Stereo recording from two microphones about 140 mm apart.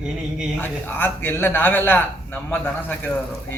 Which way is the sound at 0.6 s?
15° left (ahead or behind).